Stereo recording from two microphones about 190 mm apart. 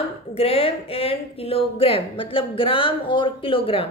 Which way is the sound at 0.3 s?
30° left (ahead or behind).